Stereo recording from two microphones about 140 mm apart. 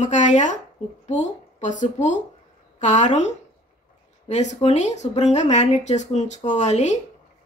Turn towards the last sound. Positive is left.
turn(degrees=55)  # may be behind; listen again after turning